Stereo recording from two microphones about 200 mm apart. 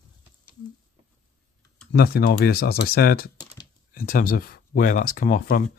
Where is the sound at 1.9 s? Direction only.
50° left (ahead or behind).